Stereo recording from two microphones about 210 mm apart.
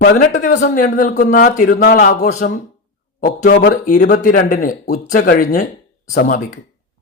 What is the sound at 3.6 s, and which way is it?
A man's voice, 35° left (ahead or behind).